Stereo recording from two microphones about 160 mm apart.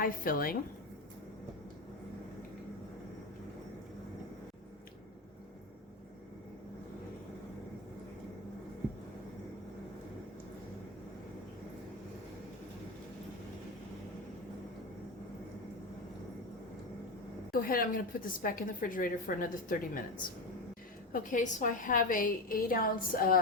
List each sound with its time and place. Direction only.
0.0 s a woman's voice: 65° left (ahead or behind)
17.5 s a woman's voice: 65° left (ahead or behind)
21.1 s a woman's voice: 55° left (ahead or behind)